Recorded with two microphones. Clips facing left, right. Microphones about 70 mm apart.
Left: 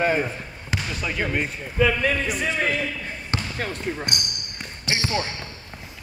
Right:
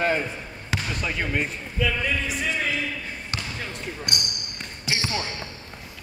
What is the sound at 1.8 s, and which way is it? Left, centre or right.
Speech, left.